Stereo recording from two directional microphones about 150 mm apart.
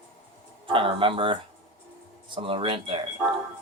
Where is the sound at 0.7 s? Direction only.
35° right (ahead or behind).